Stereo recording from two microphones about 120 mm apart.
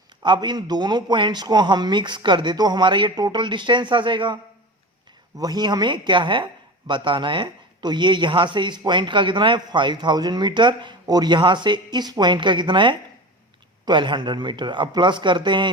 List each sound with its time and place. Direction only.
0.2 s speech: 40° right (ahead or behind)
5.4 s speech: 35° right (ahead or behind)